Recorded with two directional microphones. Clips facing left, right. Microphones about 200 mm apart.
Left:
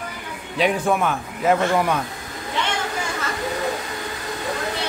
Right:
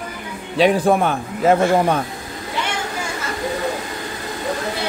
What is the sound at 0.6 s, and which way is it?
Speech, 35° right (ahead or behind).